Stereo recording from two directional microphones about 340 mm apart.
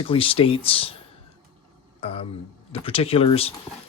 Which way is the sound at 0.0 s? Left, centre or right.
Centre.